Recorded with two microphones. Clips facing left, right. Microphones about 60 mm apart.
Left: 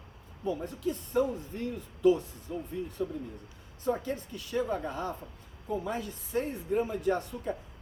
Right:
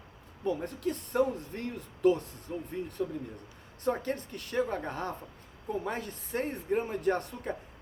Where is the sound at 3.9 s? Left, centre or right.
Right.